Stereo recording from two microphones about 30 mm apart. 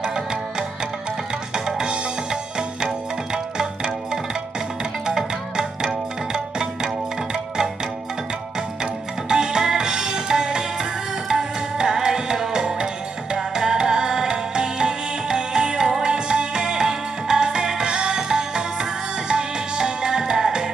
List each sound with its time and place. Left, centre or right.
0.0 s music: right
3.5 s music: right
9.3 s music: right